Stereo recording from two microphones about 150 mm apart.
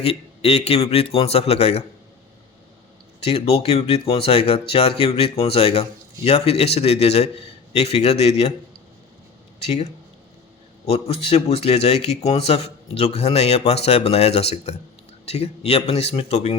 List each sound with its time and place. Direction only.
0.0 s speech: 40° left (ahead or behind)
3.2 s speech: 40° left (ahead or behind)
9.6 s speech: 45° left (ahead or behind)